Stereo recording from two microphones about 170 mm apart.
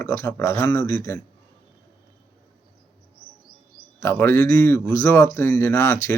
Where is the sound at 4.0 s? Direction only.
15° left (ahead or behind).